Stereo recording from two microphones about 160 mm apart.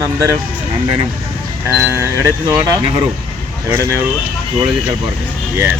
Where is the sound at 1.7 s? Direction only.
15° right (ahead or behind).